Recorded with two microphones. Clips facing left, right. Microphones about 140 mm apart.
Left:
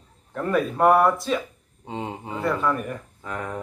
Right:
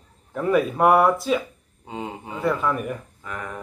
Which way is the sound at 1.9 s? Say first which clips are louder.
Left 1 dB; 25° left (ahead or behind).